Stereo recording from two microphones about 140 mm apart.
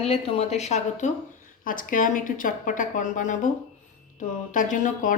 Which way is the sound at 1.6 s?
75° left (ahead or behind).